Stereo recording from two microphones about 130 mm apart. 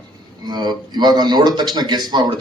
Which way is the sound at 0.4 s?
35° right (ahead or behind).